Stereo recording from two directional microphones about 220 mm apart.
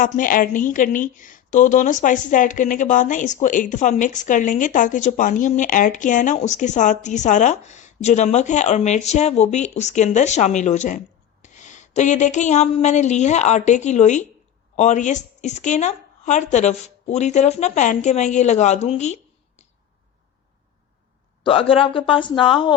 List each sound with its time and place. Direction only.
0.0 s a woman's voice: 40° left (ahead or behind)
21.4 s speech: 25° left (ahead or behind)